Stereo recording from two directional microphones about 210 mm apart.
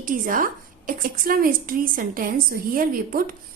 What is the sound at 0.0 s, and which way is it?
A woman's voice, 40° right (ahead or behind).